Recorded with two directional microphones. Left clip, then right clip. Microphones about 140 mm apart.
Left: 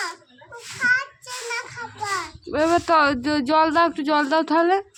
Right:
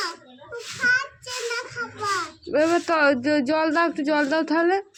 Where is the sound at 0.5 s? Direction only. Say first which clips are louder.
Left 1 dB; 30° left (ahead or behind).